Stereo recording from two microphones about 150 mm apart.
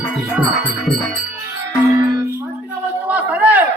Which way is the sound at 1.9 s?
20° right (ahead or behind).